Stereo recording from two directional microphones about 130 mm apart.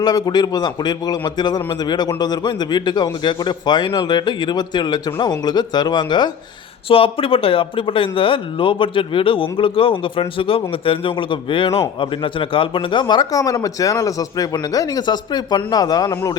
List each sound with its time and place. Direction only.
0.0 s speech: 30° left (ahead or behind)
6.8 s speech: 45° left (ahead or behind); by 16.3 s 30° left (ahead or behind)